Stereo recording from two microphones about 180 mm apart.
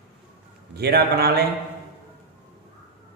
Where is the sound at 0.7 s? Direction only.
65° right (ahead or behind).